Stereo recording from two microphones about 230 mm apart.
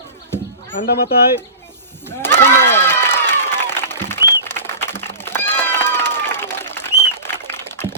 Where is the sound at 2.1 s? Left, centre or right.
Centre.